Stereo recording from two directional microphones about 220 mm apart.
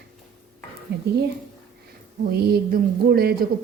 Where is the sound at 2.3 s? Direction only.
45° right (ahead or behind).